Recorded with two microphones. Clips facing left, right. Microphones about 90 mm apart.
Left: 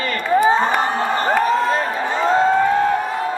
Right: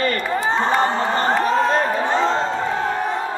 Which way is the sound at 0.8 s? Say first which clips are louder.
Right 1 dB; 15° left (ahead or behind).